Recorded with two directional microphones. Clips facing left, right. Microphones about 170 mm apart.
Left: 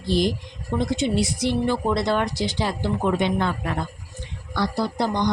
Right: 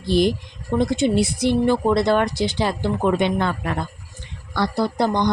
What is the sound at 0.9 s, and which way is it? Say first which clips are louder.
A woman's voice: right 4 dB; 55° right (ahead or behind).